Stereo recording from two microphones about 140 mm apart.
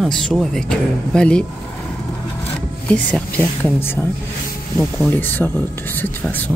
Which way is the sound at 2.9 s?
10° left (ahead or behind).